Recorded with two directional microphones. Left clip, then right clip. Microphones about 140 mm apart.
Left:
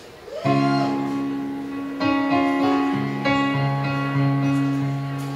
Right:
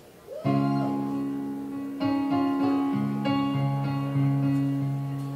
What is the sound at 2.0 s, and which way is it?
Music, 15° left (ahead or behind).